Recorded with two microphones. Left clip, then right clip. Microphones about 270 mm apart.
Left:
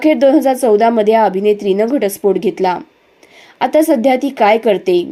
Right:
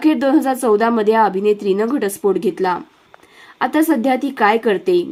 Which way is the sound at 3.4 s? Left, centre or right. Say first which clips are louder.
Left 5 dB; centre.